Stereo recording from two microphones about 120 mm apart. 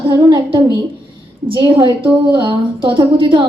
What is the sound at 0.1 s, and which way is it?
A woman's voice, 40° right (ahead or behind).